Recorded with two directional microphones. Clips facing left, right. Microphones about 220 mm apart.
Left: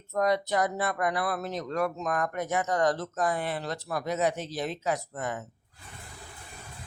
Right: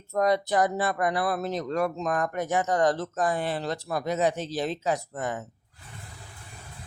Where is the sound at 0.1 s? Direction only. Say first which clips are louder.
Right 2 dB; 35° right (ahead or behind).